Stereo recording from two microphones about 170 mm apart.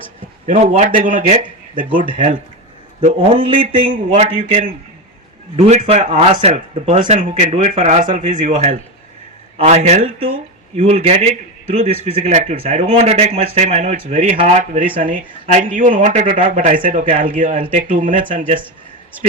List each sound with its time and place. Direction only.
0.4 s speech: 45° right (ahead or behind)
3.0 s a man's voice: 35° right (ahead or behind)
8.0 s speech: 55° right (ahead or behind)
9.6 s a man's voice: 40° right (ahead or behind)
15.9 s speech: 45° right (ahead or behind)